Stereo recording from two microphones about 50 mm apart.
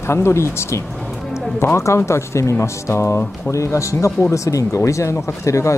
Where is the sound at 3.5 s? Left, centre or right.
Left.